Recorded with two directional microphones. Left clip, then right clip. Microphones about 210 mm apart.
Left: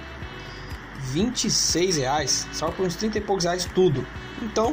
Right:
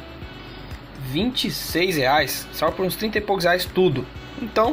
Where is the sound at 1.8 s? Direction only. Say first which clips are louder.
Right 4 dB; centre (ahead or behind).